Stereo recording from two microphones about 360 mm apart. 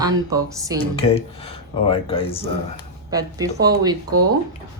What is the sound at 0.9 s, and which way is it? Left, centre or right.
Speech, centre.